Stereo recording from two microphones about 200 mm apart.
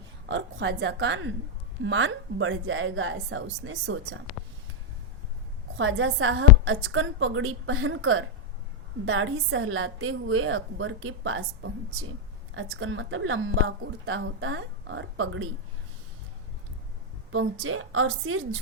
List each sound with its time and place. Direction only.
0.3 s a woman's voice: 65° right (ahead or behind)
5.7 s a woman's voice: 75° right (ahead or behind)
17.3 s a woman's voice: 90° right